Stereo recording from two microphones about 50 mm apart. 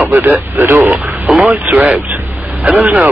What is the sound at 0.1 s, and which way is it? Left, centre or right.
Speech, right.